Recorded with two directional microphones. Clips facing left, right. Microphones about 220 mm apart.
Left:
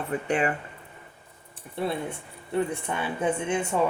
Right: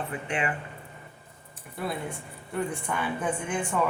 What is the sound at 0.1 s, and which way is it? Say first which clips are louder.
Speech: left 9 dB; 40° left (ahead or behind).